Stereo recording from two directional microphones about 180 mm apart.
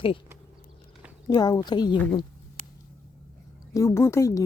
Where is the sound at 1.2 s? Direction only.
20° left (ahead or behind).